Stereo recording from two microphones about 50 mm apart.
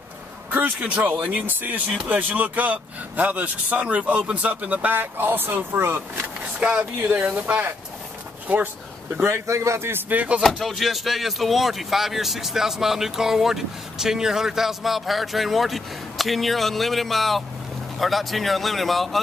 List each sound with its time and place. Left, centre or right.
0.5 s speech: right
6.6 s speech: right
9.2 s speech: right
10.0 s speech: right
10.6 s speech: centre